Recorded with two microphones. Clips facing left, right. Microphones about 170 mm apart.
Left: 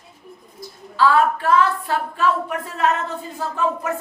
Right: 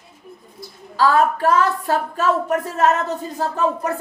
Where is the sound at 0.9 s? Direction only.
40° right (ahead or behind).